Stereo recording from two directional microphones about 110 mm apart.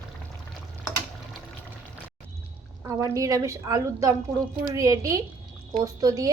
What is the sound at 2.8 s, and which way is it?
A woman's voice, 30° right (ahead or behind).